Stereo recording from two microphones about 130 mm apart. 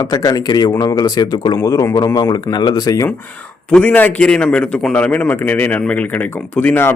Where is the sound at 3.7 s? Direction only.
10° left (ahead or behind).